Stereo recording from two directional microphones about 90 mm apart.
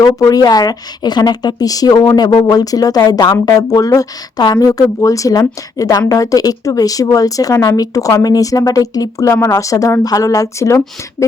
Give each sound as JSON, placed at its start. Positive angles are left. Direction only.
{"t": 0.0, "sound": "speech", "side_deg": 45}